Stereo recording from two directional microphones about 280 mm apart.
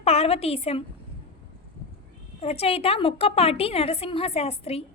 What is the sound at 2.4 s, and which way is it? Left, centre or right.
A woman's voice, left.